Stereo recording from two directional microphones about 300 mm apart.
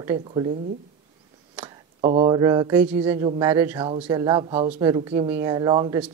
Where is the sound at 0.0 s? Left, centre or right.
Centre.